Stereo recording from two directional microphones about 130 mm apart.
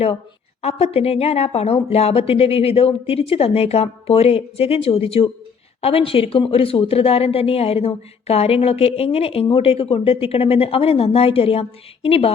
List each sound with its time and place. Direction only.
0.6 s speech: 50° left (ahead or behind)